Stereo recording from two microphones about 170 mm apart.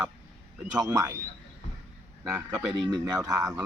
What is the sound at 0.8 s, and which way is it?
Speech, 20° right (ahead or behind).